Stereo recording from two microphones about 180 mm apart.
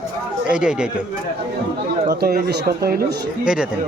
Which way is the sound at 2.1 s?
60° right (ahead or behind).